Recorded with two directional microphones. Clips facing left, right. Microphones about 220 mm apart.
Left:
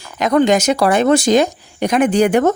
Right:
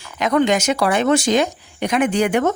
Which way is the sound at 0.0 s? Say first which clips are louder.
Left 3 dB; 40° left (ahead or behind).